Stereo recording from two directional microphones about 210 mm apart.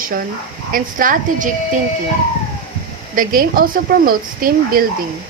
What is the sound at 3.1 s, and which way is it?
Speech, 40° right (ahead or behind).